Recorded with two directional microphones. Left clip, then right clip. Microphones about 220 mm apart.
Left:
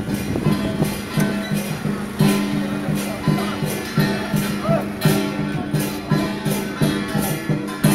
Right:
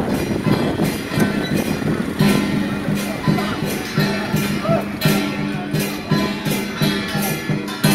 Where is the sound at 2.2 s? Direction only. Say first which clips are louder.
Right 1 dB; 15° left (ahead or behind).